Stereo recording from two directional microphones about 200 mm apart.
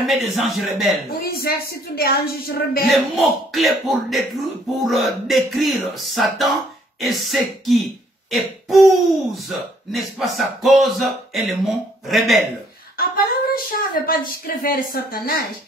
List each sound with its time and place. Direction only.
0.0 s speech: centre (ahead or behind)
1.0 s speech: 50° left (ahead or behind)
2.8 s speech: centre (ahead or behind)
12.9 s speech: 50° left (ahead or behind)